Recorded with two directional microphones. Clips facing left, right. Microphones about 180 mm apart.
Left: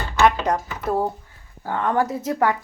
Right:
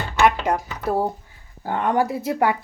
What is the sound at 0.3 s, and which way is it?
A woman's voice, 10° right (ahead or behind).